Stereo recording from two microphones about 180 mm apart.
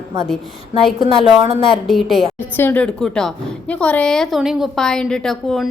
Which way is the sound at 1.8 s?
Centre (ahead or behind).